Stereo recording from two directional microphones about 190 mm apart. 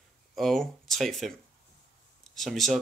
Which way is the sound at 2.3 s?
Centre (ahead or behind).